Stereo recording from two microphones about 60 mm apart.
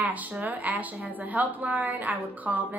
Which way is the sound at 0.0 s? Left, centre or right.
Right.